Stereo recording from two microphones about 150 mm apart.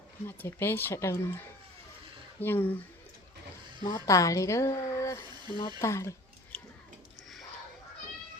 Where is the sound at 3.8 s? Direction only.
20° left (ahead or behind).